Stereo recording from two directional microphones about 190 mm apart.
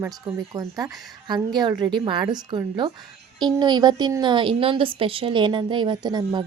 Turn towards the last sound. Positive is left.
turn(degrees=-20)  # may be behind; listen again after turning